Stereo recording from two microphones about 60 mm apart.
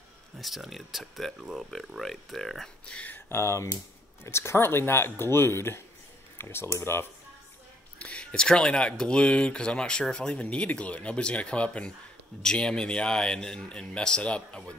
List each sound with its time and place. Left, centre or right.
0.4 s speech: centre
2.8 s speech: centre
3.3 s speech: left
8.0 s a man's voice: centre